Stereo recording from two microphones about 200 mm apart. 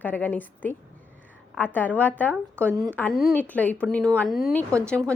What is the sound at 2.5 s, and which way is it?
Speech, 10° right (ahead or behind).